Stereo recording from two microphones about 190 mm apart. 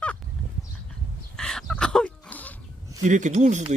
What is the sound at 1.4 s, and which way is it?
Chicken, 5° left (ahead or behind).